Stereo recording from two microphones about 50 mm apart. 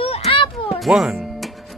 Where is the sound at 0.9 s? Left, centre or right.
Centre.